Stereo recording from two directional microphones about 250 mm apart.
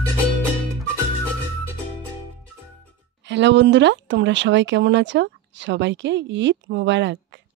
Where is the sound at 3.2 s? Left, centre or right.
Right.